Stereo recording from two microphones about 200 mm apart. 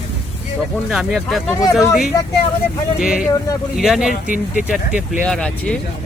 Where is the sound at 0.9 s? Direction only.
Centre (ahead or behind).